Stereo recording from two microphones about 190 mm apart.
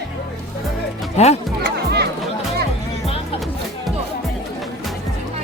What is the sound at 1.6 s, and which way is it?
Music, 55° right (ahead or behind).